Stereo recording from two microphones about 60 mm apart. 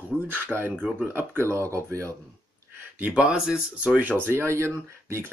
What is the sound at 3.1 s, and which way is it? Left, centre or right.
Speech, centre.